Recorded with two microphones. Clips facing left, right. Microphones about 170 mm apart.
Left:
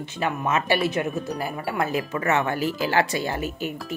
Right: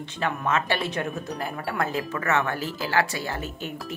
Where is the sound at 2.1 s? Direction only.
20° left (ahead or behind).